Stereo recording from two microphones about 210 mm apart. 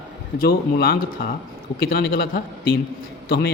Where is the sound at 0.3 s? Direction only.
45° left (ahead or behind).